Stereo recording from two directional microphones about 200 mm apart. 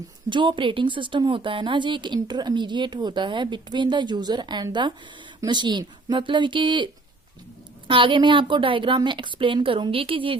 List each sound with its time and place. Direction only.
0.3 s speech: 25° right (ahead or behind)